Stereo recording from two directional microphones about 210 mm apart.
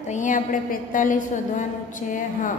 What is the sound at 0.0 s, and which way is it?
A woman's voice, 35° left (ahead or behind).